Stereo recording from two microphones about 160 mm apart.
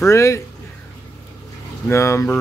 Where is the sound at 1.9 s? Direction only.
15° left (ahead or behind).